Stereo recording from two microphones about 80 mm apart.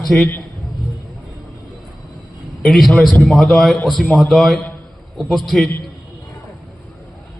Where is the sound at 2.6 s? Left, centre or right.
Centre.